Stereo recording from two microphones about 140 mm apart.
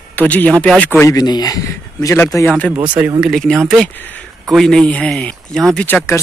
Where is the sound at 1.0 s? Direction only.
25° left (ahead or behind).